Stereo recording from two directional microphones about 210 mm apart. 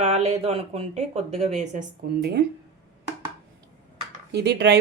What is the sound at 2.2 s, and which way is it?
Speech, 50° right (ahead or behind).